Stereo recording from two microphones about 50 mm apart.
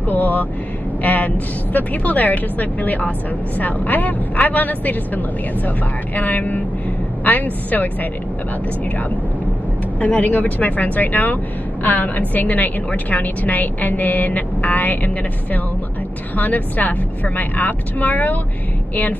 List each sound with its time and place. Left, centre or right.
0.1 s vehicle: left
1.0 s a woman's voice: left
9.9 s a woman's voice: left